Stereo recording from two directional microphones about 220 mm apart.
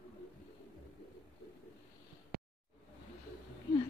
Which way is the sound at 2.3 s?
45° right (ahead or behind).